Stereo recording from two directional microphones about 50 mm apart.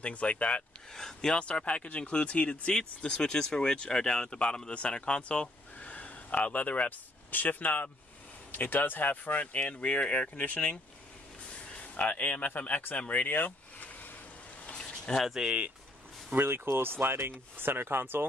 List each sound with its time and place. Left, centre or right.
0.0 s speech: left
0.9 s speech: centre
1.4 s speech: left
5.8 s speech: left
12.0 s speech: left
13.3 s vehicle: left
14.7 s a sound: centre
15.1 s speech: centre
16.3 s speech: right